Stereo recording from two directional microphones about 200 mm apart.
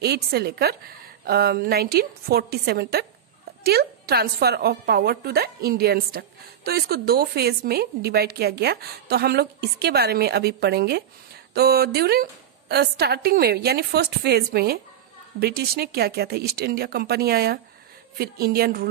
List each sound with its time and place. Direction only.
0.0 s a woman's voice: 55° right (ahead or behind)